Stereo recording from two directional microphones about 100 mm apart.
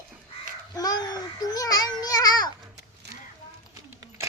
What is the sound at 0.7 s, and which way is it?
Babbling, 40° left (ahead or behind).